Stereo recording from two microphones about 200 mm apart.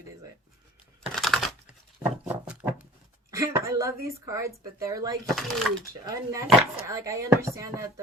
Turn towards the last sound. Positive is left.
turn(degrees=-15)  # may be behind; listen again after turning